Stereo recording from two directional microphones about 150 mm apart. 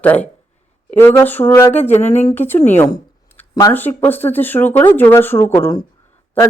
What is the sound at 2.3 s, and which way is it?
Speech, 15° left (ahead or behind).